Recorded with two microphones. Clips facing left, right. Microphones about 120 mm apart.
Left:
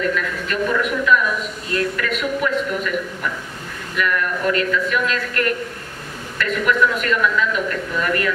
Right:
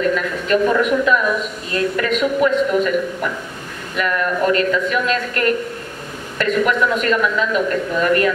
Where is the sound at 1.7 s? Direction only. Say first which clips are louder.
Right 3 dB; 25° right (ahead or behind).